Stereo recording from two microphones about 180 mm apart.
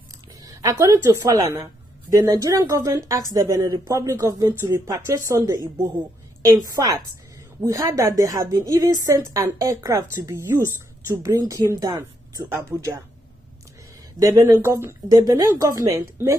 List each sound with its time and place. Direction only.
0.4 s a woman's voice: 20° right (ahead or behind)
14.2 s speech: 15° right (ahead or behind)